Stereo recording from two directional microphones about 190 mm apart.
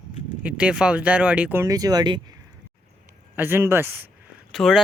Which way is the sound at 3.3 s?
10° right (ahead or behind).